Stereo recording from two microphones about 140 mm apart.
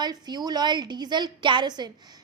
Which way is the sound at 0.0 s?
30° right (ahead or behind).